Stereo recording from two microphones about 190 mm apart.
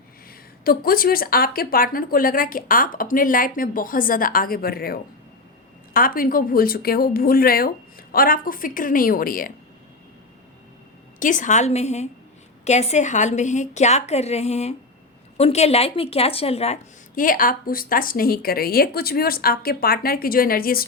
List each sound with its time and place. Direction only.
0.3 s speech: 50° left (ahead or behind)
11.2 s a woman's voice: 40° left (ahead or behind)
17.2 s speech: 45° left (ahead or behind)